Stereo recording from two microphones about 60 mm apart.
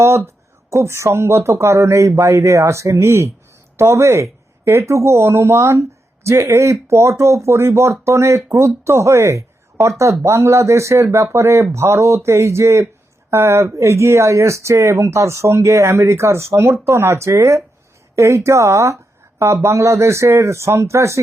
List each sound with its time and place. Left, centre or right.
0.7 s speech: right